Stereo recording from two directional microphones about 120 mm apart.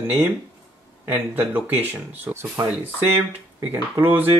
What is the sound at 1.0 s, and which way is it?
Speech, 15° right (ahead or behind).